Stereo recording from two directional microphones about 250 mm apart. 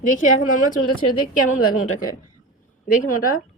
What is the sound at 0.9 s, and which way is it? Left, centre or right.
Speech, left.